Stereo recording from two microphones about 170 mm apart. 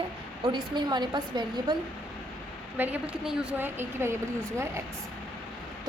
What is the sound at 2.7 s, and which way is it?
A woman's voice, 10° right (ahead or behind).